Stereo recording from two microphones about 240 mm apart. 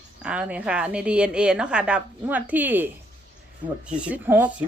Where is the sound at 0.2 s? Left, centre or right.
Centre.